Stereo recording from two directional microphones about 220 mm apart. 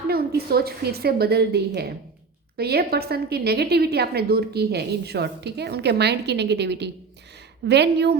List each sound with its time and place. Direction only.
0.3 s a woman's voice: 45° right (ahead or behind)